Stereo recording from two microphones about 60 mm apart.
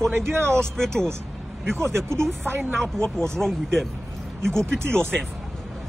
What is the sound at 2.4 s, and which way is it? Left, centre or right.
Speech, right.